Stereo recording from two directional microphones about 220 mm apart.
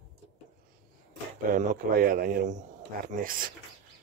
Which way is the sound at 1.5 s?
40° right (ahead or behind).